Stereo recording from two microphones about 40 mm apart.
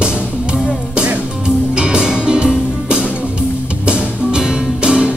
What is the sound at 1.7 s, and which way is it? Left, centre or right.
Music, right.